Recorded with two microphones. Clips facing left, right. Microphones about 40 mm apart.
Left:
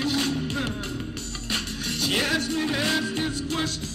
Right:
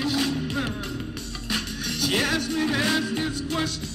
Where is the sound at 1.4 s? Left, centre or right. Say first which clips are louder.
Right 1 dB; left.